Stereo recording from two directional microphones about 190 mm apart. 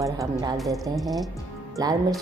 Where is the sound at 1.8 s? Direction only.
20° right (ahead or behind).